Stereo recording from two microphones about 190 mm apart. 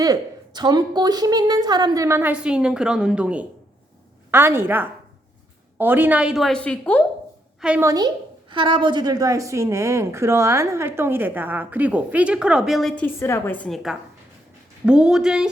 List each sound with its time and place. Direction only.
0.0 s a woman's voice: 20° right (ahead or behind); by 7.0 s 5° left (ahead or behind)
7.6 s a woman's voice: 10° right (ahead or behind)
13.1 s a woman's voice: 15° left (ahead or behind); by 15.4 s 5° right (ahead or behind)